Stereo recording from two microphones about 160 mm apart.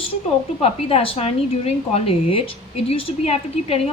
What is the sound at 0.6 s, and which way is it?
A woman's voice, 35° left (ahead or behind).